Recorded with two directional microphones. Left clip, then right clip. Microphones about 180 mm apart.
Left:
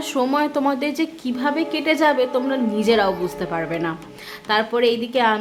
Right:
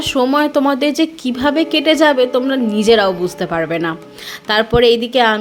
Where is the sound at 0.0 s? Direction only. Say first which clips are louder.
Right 6 dB; 25° right (ahead or behind).